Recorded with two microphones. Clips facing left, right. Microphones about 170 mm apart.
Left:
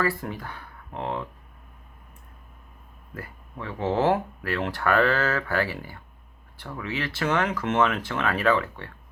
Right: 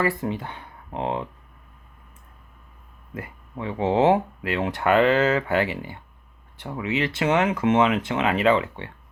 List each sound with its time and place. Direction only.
0.2 s speech: 20° right (ahead or behind)
3.2 s speech: 20° right (ahead or behind)